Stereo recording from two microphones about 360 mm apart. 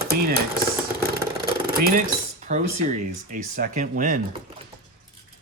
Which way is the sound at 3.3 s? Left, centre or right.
Right.